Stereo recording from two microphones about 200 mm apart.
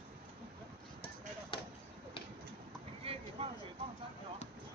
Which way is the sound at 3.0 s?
30° right (ahead or behind).